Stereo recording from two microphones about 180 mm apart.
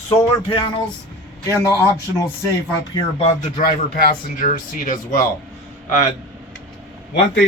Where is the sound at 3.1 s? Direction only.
35° left (ahead or behind).